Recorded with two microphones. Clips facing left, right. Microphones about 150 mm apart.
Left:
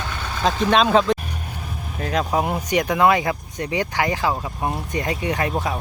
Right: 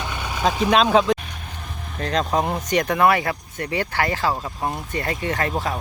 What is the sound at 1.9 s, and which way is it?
Speech, 10° left (ahead or behind).